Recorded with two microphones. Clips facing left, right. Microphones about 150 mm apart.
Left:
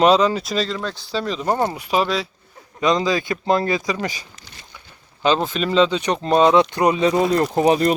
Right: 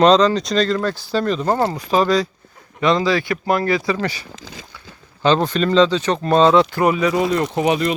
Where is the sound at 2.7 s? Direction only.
20° left (ahead or behind).